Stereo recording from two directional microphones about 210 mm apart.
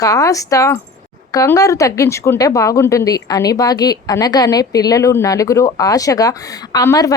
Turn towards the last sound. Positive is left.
turn(degrees=15)  # may be behind; listen again after turning